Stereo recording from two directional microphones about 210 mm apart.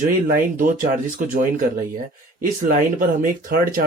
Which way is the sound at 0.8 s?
40° right (ahead or behind).